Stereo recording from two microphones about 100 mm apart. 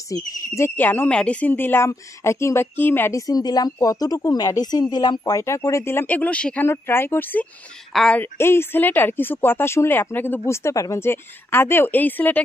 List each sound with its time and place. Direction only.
0.1 s speech: 25° left (ahead or behind)
3.2 s a woman's voice: 40° left (ahead or behind)
5.4 s speech: 30° left (ahead or behind); by 6.7 s 15° left (ahead or behind)
6.7 s speech: 25° left (ahead or behind)
7.9 s a woman's voice: 5° left (ahead or behind)
8.2 s speech: 25° left (ahead or behind)